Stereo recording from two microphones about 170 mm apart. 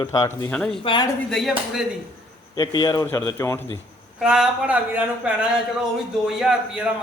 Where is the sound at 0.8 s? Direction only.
30° left (ahead or behind).